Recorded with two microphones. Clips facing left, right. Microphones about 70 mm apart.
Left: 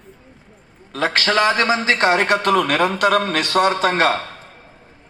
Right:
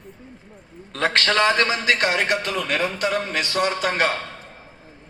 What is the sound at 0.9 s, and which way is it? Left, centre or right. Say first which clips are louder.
A man's voice: left 2 dB; centre.